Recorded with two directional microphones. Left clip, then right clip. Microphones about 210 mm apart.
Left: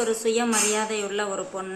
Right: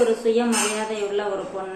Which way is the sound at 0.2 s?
25° left (ahead or behind).